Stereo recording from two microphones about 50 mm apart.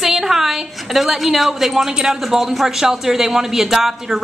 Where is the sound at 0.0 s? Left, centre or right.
Centre.